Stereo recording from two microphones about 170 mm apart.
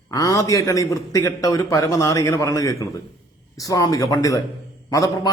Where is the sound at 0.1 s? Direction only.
20° left (ahead or behind).